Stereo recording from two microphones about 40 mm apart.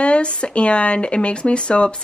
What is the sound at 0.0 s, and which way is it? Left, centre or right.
Speech, left.